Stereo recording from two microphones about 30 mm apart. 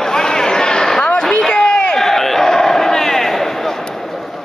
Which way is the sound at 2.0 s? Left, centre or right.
Centre.